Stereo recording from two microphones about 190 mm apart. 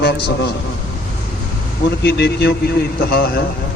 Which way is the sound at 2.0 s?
60° left (ahead or behind).